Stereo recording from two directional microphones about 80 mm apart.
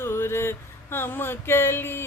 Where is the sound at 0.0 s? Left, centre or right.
Left.